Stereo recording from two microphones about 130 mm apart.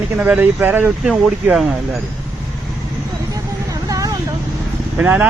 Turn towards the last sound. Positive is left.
turn(degrees=-10)  # may be behind; listen again after turning